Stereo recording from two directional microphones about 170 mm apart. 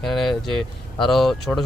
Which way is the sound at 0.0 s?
Centre (ahead or behind).